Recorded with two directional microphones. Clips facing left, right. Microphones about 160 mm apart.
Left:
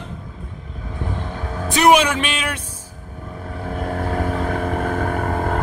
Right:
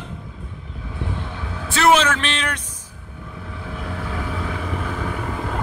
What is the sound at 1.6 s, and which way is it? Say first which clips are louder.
Speech: left 2 dB; 15° left (ahead or behind).